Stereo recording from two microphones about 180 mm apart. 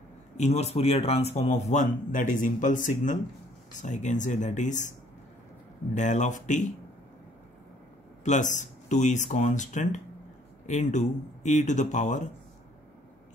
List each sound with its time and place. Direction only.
0.4 s a man's voice: 35° left (ahead or behind)
5.9 s speech: 40° left (ahead or behind)
8.2 s a man's voice: 40° left (ahead or behind)